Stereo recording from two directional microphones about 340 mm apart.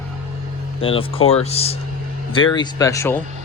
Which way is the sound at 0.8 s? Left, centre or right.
Centre.